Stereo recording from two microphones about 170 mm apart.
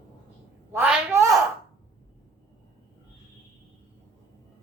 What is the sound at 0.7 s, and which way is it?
Speech, 10° right (ahead or behind).